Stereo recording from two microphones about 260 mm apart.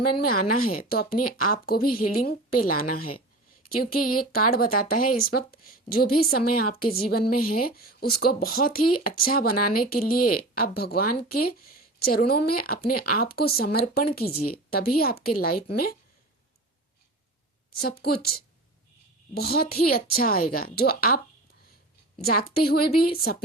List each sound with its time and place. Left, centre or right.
0.0 s speech: left
0.3 s speech: left
4.2 s speech: left
17.7 s speech: left
22.2 s speech: left